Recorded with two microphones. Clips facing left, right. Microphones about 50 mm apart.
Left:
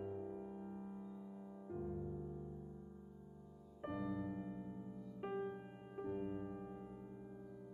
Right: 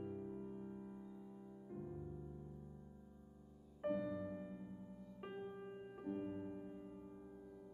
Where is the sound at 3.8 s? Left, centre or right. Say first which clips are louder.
Right 2 dB; centre.